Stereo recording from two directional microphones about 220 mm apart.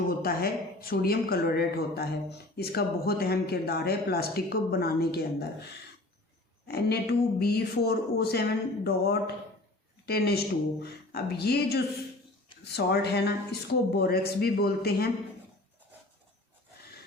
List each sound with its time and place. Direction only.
0.2 s a man's voice: 45° left (ahead or behind)
6.7 s a man's voice: 45° left (ahead or behind)